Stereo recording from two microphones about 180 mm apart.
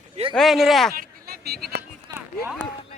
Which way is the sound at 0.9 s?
55° right (ahead or behind).